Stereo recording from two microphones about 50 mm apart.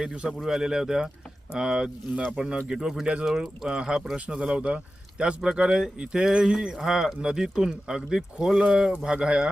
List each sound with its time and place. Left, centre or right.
0.0 s speech: centre